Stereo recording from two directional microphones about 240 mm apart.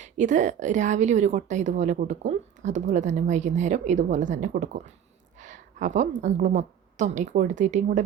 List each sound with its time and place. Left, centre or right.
0.0 s a woman's voice: right